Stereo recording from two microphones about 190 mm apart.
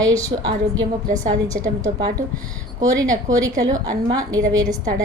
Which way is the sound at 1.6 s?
20° right (ahead or behind).